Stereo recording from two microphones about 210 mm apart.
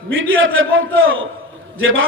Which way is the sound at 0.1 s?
70° right (ahead or behind).